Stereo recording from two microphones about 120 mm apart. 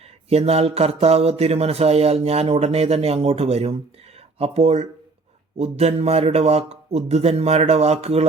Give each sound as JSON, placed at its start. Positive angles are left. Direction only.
{"t": 0.3, "sound": "speech", "side_deg": -60}